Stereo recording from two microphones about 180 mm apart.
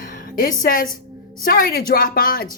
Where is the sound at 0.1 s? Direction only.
50° left (ahead or behind).